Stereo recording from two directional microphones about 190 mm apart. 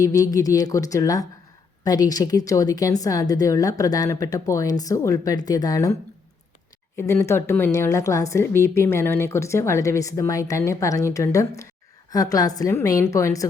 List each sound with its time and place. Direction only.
0.0 s a woman's voice: 20° left (ahead or behind)
6.9 s a woman's voice: 15° left (ahead or behind)